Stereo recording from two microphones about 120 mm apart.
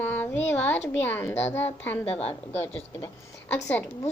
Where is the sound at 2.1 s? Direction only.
55° left (ahead or behind).